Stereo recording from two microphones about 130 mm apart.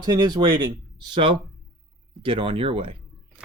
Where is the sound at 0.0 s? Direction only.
30° right (ahead or behind); by 2.9 s 45° right (ahead or behind).